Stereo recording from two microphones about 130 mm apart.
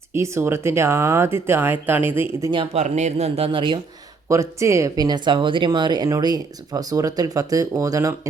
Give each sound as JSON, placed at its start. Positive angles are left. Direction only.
{"t": 0.1, "sound": "speech", "side_deg": -20}
{"t": 2.7, "sound": "speech", "side_deg": -60}
{"t": 4.3, "sound": "speech", "side_deg": -25}